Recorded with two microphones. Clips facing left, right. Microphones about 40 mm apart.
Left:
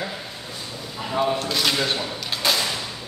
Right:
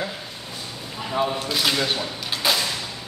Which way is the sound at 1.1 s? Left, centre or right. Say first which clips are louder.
Left 1 dB; centre.